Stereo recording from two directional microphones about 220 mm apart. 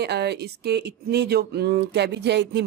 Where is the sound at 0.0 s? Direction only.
50° right (ahead or behind).